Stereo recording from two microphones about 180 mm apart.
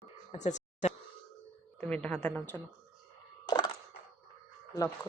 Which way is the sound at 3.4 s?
25° left (ahead or behind).